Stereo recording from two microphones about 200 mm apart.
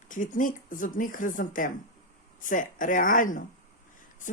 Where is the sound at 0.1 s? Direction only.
40° left (ahead or behind).